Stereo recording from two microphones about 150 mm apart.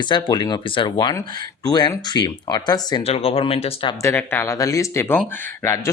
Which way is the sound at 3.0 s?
40° left (ahead or behind).